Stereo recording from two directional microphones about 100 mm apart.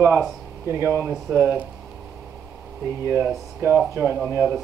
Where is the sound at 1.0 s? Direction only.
15° right (ahead or behind).